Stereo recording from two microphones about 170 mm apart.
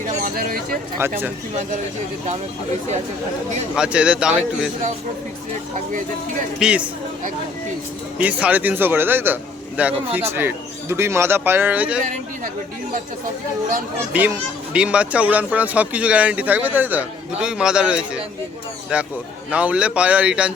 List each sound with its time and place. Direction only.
0.0 s a sound: 60° right (ahead or behind)
3.8 s a man's voice: 5° right (ahead or behind)
6.6 s a man's voice: 5° right (ahead or behind)
8.2 s speech: 10° right (ahead or behind)
14.1 s speech: 10° right (ahead or behind)